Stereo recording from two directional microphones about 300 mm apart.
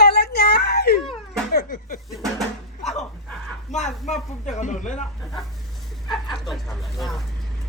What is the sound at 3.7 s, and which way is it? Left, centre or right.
A man's voice, left.